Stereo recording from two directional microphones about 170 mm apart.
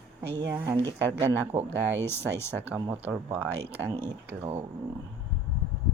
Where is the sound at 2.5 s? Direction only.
10° right (ahead or behind).